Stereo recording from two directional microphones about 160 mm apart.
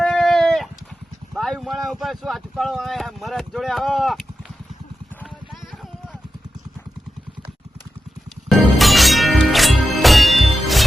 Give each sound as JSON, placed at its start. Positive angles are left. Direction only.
{"t": 0.0, "sound": "a sound", "side_deg": 0}
{"t": 1.3, "sound": "speech", "side_deg": 0}
{"t": 8.4, "sound": "music", "side_deg": 0}